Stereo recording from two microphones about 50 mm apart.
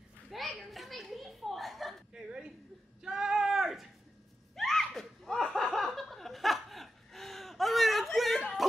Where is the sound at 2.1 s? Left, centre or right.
Centre.